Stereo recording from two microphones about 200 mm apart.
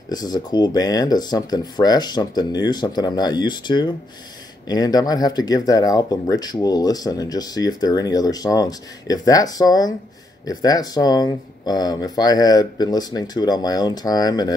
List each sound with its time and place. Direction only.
0.1 s speech: 20° left (ahead or behind)